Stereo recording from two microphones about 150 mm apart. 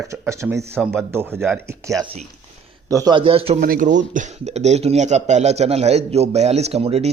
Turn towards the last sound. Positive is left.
turn(degrees=-45)  # may be behind; listen again after turning